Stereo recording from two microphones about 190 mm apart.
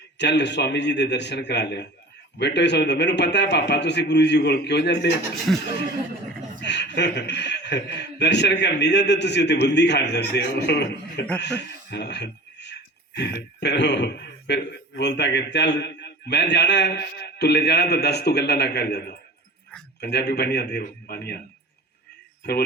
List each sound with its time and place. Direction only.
0.2 s a man's voice: 65° left (ahead or behind)
6.6 s a man's voice: 65° left (ahead or behind)
11.9 s a sound: 65° left (ahead or behind)
13.1 s a man's voice: 65° left (ahead or behind)